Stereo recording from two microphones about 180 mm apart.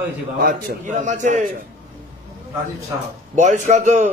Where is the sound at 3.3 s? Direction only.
45° right (ahead or behind).